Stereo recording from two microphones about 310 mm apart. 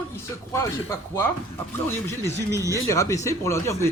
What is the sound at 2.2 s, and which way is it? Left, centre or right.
Speech, centre.